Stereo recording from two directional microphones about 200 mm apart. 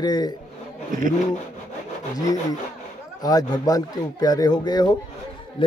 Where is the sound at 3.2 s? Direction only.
20° left (ahead or behind).